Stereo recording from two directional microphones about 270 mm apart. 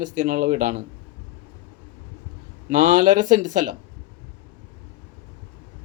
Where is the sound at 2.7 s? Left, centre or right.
Right.